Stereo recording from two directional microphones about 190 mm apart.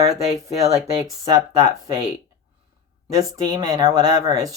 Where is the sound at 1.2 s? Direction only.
20° right (ahead or behind).